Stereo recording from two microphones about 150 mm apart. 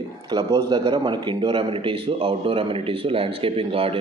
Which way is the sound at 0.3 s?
30° right (ahead or behind).